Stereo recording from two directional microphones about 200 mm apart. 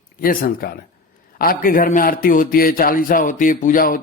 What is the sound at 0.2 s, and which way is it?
A man's voice, 45° left (ahead or behind).